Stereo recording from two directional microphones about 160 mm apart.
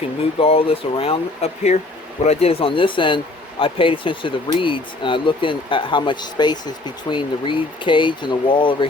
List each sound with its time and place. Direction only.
0.2 s speech: 35° left (ahead or behind)